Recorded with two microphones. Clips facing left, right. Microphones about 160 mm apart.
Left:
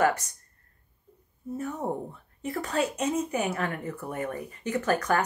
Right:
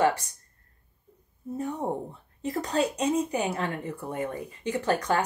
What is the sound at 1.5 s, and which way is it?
Speech, 20° right (ahead or behind).